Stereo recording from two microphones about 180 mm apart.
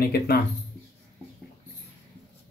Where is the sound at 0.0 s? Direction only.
55° left (ahead or behind).